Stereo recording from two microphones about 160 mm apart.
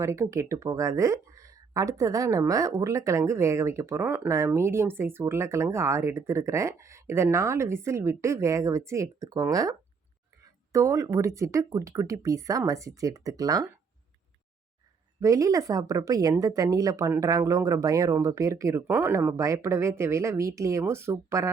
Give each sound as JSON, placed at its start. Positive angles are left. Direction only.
{"t": 0.0, "sound": "speech", "side_deg": -20}
{"t": 15.2, "sound": "speech", "side_deg": -20}